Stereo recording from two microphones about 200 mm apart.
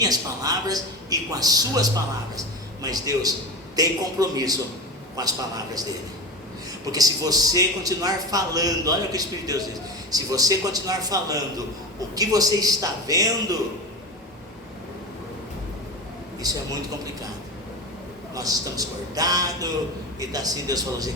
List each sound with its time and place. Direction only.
0.0 s a man's voice: 20° right (ahead or behind)
6.8 s a man's voice: 20° right (ahead or behind)
16.4 s a man's voice: 20° right (ahead or behind)
18.3 s a man's voice: 20° right (ahead or behind)